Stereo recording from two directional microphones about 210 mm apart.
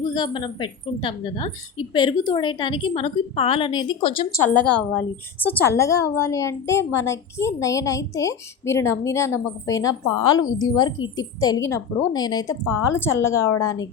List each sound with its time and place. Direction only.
0.1 s a woman's voice: 20° left (ahead or behind)
4.7 s a woman's voice: 10° left (ahead or behind)